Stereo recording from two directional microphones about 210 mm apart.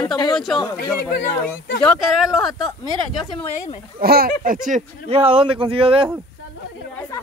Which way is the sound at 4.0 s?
45° right (ahead or behind).